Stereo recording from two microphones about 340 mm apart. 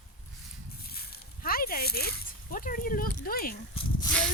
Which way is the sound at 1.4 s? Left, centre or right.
Left.